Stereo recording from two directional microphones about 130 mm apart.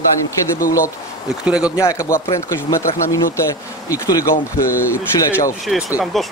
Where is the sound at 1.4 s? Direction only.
10° right (ahead or behind).